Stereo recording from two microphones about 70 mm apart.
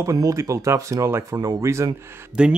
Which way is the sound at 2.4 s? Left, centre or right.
Centre.